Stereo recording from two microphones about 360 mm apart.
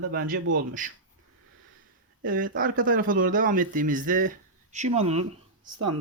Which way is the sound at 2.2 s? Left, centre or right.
Right.